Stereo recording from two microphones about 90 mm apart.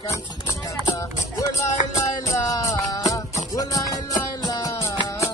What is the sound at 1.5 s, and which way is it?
Music, 35° left (ahead or behind).